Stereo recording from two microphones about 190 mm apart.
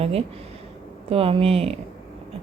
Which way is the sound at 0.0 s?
30° right (ahead or behind).